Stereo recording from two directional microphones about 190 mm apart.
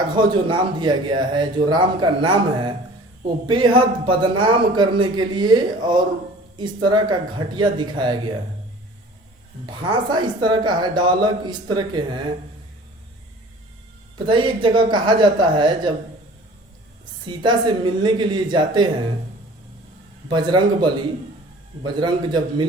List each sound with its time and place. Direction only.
0.2 s speech: 25° right (ahead or behind)
9.6 s speech: 25° right (ahead or behind)
14.3 s speech: 25° right (ahead or behind)
17.2 s speech: 25° right (ahead or behind)
20.2 s speech: 25° right (ahead or behind)